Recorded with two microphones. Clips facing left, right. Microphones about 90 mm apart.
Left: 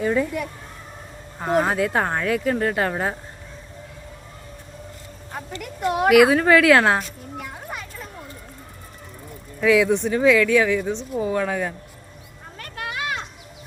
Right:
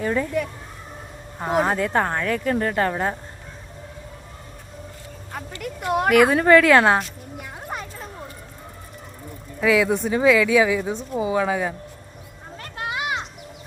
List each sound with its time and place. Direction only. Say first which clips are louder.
0.0 s speech: left 1 dB; 5° left (ahead or behind)
5.8 s speech: left 2 dB; centre (ahead or behind)
9.6 s speech: left 1 dB; centre (ahead or behind)
12.5 s a sound: right 2 dB; 25° right (ahead or behind)